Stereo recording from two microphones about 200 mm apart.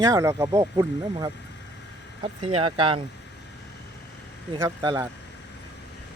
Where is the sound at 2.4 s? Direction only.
30° right (ahead or behind).